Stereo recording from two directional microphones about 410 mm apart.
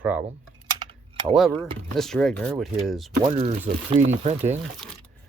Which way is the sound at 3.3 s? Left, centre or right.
Centre.